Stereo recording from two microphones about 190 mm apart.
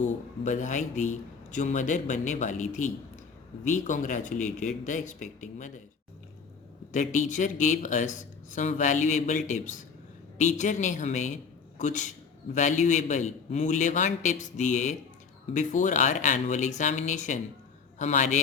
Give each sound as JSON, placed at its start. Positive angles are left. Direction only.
{"t": 0.0, "sound": "speech", "side_deg": 40}
{"t": 6.9, "sound": "speech", "side_deg": 40}